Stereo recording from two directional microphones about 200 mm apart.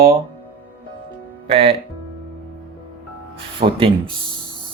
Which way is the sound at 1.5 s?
30° right (ahead or behind).